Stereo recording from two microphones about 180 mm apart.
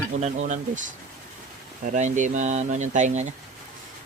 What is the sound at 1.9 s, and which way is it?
Speech, 40° right (ahead or behind).